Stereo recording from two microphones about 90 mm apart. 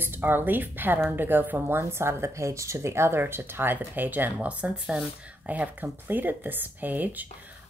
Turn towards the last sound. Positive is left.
turn(degrees=-20)  # may be behind; listen again after turning